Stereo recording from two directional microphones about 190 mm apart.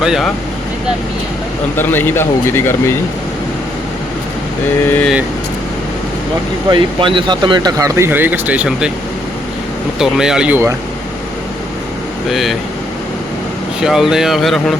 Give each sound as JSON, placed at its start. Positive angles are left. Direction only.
{"t": 0.0, "sound": "speech", "side_deg": 0}
{"t": 1.7, "sound": "a man's voice", "side_deg": 10}
{"t": 4.9, "sound": "a man's voice", "side_deg": 10}
{"t": 6.7, "sound": "speech", "side_deg": -25}
{"t": 10.0, "sound": "speech", "side_deg": -5}
{"t": 12.3, "sound": "speech", "side_deg": 0}
{"t": 13.8, "sound": "speech", "side_deg": 0}